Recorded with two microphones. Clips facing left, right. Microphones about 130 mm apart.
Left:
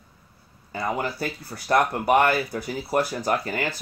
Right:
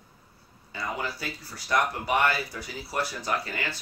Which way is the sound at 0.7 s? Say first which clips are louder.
Left 6 dB; 50° left (ahead or behind).